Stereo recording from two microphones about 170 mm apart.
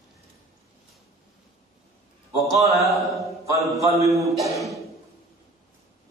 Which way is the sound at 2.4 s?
20° right (ahead or behind).